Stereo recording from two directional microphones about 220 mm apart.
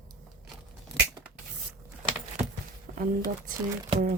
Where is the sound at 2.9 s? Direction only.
40° right (ahead or behind).